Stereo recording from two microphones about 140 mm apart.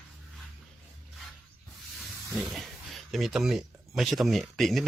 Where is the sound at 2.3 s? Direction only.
Centre (ahead or behind).